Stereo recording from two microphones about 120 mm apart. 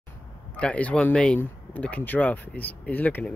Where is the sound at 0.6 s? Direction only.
10° left (ahead or behind).